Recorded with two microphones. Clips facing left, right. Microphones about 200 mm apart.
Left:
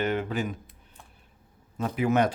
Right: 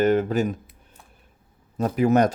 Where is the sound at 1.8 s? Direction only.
40° right (ahead or behind).